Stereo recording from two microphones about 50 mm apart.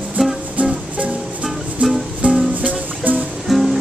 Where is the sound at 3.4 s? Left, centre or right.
Centre.